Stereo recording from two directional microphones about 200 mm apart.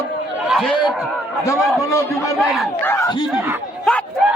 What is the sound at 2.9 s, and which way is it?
Speech, 15° left (ahead or behind).